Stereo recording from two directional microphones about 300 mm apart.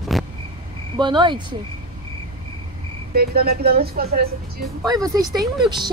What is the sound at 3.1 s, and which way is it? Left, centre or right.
Speech, right.